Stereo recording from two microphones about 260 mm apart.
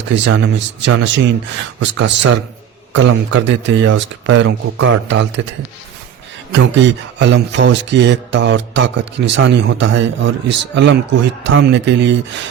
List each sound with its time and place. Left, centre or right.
0.1 s speech: right
6.5 s speech: right